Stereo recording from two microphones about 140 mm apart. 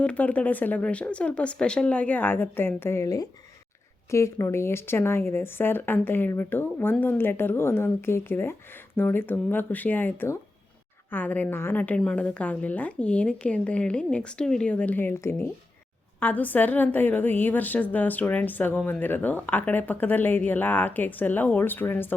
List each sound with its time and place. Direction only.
0.0 s a woman's voice: 10° left (ahead or behind)